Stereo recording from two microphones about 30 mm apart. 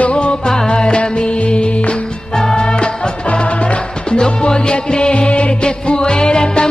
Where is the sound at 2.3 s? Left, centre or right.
Left.